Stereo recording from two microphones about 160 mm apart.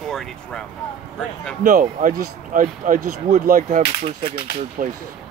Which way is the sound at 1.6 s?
60° right (ahead or behind).